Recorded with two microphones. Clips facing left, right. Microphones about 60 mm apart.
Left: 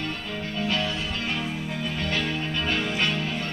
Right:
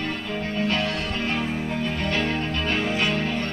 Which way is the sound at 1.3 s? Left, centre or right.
Right.